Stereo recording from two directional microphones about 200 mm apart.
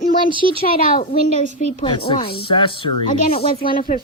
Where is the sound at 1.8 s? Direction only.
25° left (ahead or behind).